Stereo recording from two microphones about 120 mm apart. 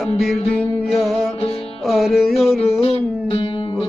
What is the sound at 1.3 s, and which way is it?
Music, 55° left (ahead or behind).